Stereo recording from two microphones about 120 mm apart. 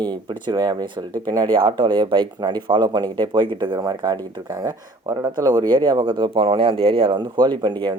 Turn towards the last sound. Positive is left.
turn(degrees=-40)  # may be behind; listen again after turning